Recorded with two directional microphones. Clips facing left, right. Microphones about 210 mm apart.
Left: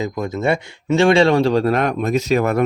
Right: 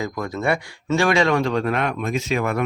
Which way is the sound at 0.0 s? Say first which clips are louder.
Left 4 dB; 20° left (ahead or behind).